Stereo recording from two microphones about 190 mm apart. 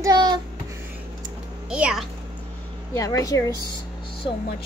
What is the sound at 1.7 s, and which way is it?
Speech, 5° right (ahead or behind).